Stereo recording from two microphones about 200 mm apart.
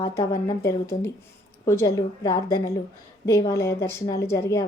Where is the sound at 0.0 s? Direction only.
15° left (ahead or behind).